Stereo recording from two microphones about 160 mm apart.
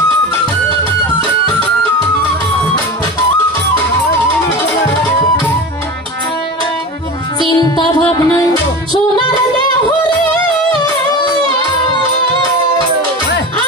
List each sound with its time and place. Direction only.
7.3 s music: 25° left (ahead or behind)